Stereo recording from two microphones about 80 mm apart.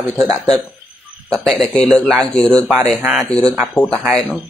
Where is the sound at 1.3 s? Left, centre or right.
Centre.